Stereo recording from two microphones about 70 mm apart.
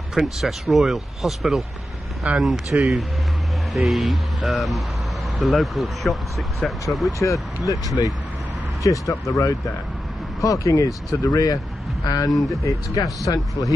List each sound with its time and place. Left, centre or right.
0.1 s speech: centre
7.1 s speech: left